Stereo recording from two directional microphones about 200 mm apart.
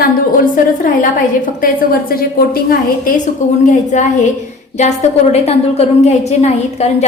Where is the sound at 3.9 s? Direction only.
35° left (ahead or behind).